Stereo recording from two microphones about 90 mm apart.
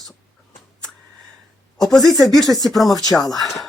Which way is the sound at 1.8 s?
5° left (ahead or behind).